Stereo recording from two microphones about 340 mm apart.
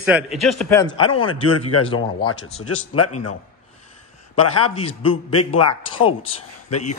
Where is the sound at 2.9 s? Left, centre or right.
Left.